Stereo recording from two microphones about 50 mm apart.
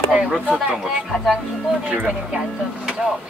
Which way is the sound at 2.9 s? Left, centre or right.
Centre.